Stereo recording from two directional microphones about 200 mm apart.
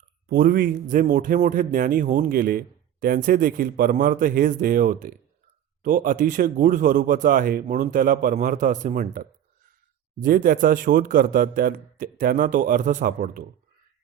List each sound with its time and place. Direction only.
0.3 s a man's voice: 45° right (ahead or behind)